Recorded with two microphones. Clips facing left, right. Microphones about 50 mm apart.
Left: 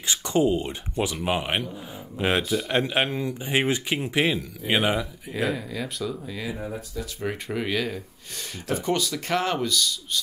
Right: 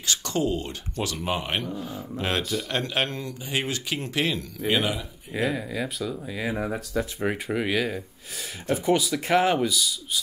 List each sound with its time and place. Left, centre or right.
0.0 s a man's voice: centre
5.3 s speech: centre
6.5 s speech: right
7.4 s speech: centre